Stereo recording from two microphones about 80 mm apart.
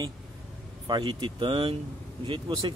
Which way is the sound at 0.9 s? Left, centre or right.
Right.